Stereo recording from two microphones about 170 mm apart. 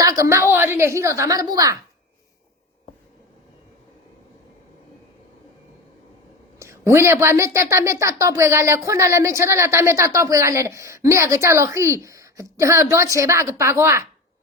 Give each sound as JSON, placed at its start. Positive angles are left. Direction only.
{"t": 0.0, "sound": "a sound", "side_deg": -20}
{"t": 0.5, "sound": "a woman's voice", "side_deg": -15}
{"t": 6.6, "sound": "speech", "side_deg": -15}